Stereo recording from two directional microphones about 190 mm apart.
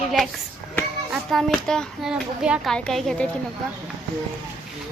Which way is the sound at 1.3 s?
Centre (ahead or behind).